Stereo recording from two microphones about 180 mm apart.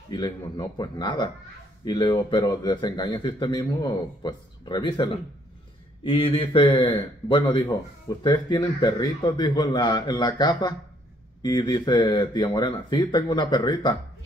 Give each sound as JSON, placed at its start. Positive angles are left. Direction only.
{"t": 0.1, "sound": "a man's voice", "side_deg": 25}